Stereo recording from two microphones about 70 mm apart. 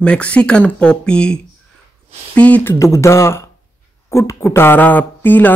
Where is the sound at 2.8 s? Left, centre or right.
Left.